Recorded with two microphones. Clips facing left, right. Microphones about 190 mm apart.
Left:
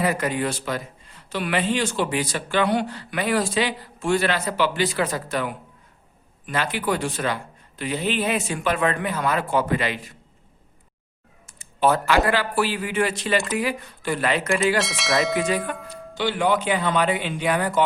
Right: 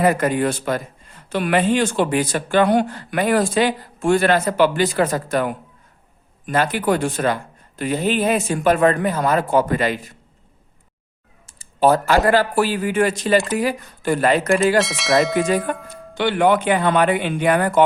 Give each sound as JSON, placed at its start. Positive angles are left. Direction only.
{"t": 0.0, "sound": "speech", "side_deg": -50}
{"t": 11.4, "sound": "speech", "side_deg": -35}
{"t": 14.8, "sound": "speech", "side_deg": 0}
{"t": 15.4, "sound": "speech", "side_deg": -45}
{"t": 16.1, "sound": "speech", "side_deg": -60}